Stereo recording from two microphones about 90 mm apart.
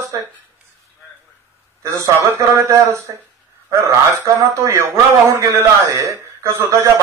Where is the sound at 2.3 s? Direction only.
35° right (ahead or behind).